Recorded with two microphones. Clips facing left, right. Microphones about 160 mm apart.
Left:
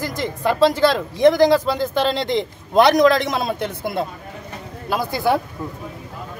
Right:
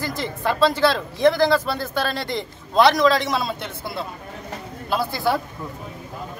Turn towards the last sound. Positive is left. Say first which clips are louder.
# left 2 dB
turn(degrees=15)  # may be behind; listen again after turning